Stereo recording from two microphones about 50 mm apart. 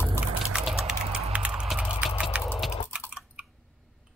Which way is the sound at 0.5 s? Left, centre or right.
Centre.